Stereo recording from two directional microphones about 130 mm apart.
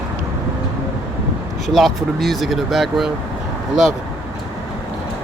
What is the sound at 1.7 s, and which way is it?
Speech, centre (ahead or behind).